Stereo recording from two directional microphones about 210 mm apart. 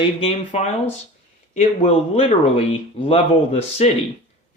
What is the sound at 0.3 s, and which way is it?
Speech, 30° left (ahead or behind).